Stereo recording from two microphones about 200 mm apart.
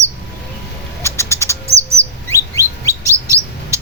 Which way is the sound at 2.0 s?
15° left (ahead or behind).